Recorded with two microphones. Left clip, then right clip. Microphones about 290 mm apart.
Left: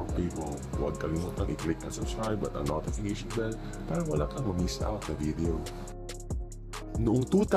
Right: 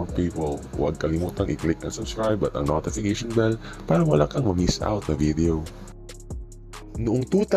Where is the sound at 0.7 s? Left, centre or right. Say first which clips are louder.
Right 7 dB; centre.